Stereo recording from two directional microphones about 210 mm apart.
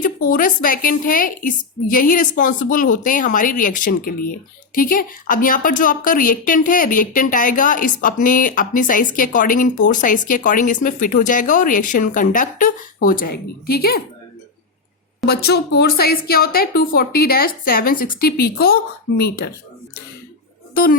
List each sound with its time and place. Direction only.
0.0 s a woman's voice: 40° left (ahead or behind)
15.3 s a woman's voice: 50° left (ahead or behind)